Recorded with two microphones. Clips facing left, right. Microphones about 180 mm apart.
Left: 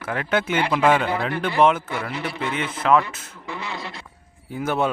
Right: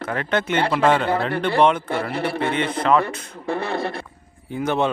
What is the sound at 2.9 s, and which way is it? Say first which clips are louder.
Speech: even; 5° left (ahead or behind).